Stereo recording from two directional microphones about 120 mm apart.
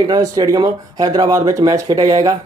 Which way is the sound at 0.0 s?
35° right (ahead or behind).